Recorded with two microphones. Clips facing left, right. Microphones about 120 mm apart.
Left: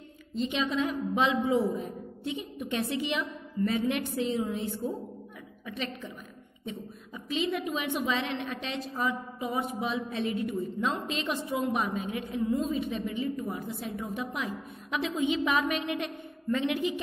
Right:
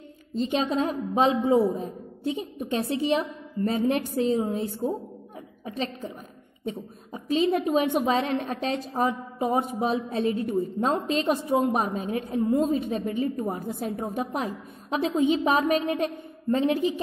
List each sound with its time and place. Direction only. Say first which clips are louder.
0.3 s a woman's voice: right 4 dB; 40° right (ahead or behind)